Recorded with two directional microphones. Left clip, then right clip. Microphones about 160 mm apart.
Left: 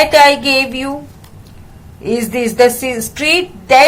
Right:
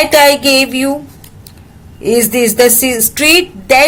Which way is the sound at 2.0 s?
40° right (ahead or behind).